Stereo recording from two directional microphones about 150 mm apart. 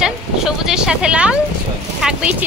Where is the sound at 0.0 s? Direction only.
5° right (ahead or behind).